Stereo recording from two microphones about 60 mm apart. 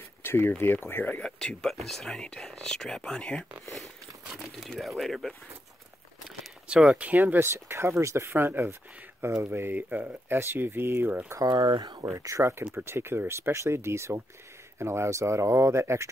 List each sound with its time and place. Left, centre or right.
0.2 s speech: left
1.2 s speech: centre
3.8 s speech: centre
6.2 s speech: centre
7.3 s speech: right
11.3 s speech: right
12.7 s speech: right